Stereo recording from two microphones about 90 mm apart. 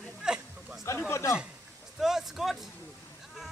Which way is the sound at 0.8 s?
30° left (ahead or behind).